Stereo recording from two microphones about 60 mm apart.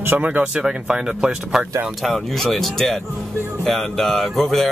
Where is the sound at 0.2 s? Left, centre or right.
Right.